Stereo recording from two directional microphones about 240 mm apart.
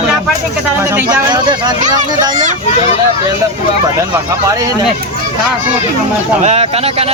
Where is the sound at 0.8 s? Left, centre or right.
Centre.